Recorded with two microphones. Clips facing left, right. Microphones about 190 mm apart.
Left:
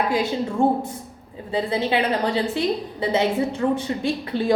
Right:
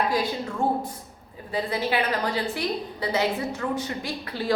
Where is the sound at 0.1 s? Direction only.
25° left (ahead or behind).